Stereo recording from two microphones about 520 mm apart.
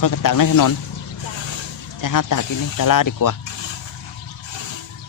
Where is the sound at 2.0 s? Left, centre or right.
Left.